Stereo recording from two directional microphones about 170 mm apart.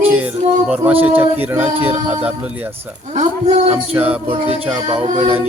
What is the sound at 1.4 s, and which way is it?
Speech, 10° right (ahead or behind).